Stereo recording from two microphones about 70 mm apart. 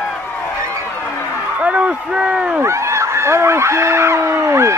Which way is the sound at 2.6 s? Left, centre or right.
Right.